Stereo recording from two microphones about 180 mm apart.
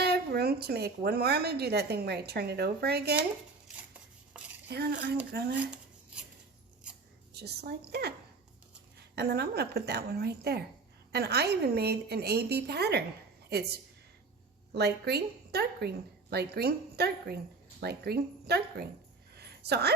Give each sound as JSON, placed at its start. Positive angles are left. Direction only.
{"t": 0.0, "sound": "a woman's voice", "side_deg": -65}
{"t": 4.7, "sound": "a woman's voice", "side_deg": -65}
{"t": 7.3, "sound": "a woman's voice", "side_deg": -65}
{"t": 9.1, "sound": "a woman's voice", "side_deg": -65}
{"t": 14.7, "sound": "a woman's voice", "side_deg": -65}
{"t": 19.4, "sound": "a sound", "side_deg": -65}